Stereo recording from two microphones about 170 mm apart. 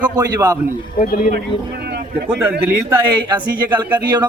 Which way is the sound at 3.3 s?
25° right (ahead or behind).